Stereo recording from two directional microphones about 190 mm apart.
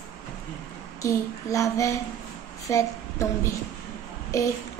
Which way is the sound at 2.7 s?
15° left (ahead or behind).